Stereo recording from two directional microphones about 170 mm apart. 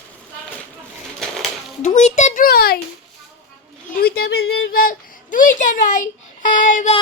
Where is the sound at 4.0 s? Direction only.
65° left (ahead or behind).